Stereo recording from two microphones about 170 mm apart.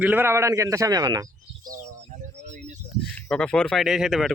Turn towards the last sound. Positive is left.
turn(degrees=0)  # may be behind; listen again after turning